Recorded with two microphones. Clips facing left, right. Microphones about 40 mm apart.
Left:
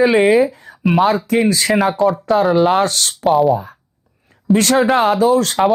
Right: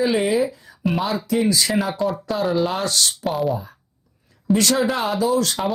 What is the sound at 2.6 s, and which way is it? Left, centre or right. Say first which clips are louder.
Speech: left 7 dB; left.